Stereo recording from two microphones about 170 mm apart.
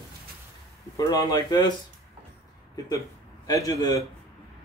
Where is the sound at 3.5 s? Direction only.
20° left (ahead or behind).